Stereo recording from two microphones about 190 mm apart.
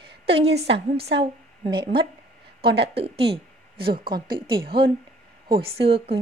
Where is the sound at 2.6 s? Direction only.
60° right (ahead or behind).